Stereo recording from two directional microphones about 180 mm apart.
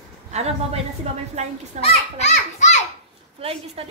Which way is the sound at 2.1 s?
40° left (ahead or behind).